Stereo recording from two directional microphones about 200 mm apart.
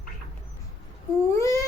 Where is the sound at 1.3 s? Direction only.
15° left (ahead or behind).